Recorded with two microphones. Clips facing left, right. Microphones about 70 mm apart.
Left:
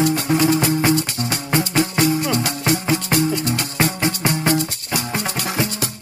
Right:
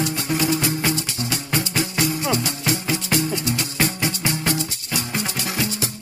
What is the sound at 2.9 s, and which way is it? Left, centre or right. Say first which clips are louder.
Music: left 4 dB; left.